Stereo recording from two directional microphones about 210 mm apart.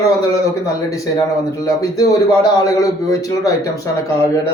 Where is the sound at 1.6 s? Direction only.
15° left (ahead or behind).